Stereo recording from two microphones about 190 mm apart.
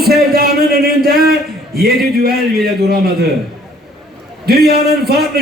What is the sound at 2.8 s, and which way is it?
Speech, 55° right (ahead or behind).